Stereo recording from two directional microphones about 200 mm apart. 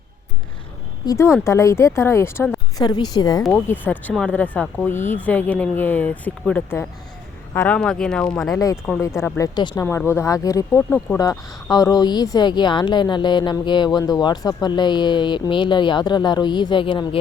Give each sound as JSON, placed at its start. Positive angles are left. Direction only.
{"t": 1.0, "sound": "speech", "side_deg": 15}
{"t": 3.4, "sound": "speech", "side_deg": 10}
{"t": 8.5, "sound": "speech", "side_deg": 15}